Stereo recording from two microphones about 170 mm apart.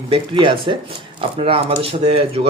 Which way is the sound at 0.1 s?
30° right (ahead or behind).